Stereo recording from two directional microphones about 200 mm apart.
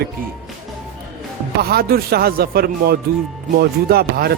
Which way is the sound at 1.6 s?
50° right (ahead or behind).